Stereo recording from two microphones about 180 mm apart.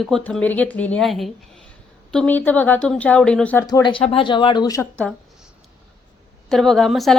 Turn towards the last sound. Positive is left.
turn(degrees=0)  # may be behind; listen again after turning